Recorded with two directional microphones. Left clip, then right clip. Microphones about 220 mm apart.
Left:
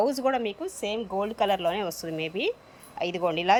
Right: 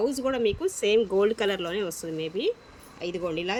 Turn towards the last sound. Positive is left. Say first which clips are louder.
# left 6 dB
turn(degrees=5)  # may be behind; listen again after turning